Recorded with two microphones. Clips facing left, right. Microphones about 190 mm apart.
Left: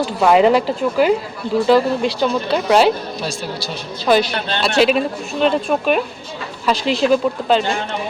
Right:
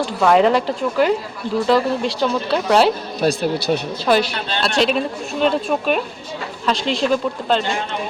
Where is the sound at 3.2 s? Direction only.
60° right (ahead or behind).